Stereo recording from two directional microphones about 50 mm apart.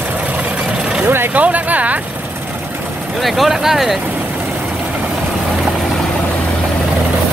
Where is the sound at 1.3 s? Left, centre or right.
Right.